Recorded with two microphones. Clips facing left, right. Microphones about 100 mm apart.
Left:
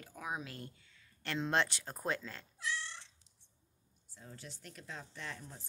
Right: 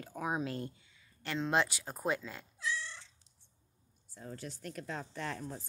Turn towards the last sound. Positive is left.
turn(degrees=-55)  # may be behind; listen again after turning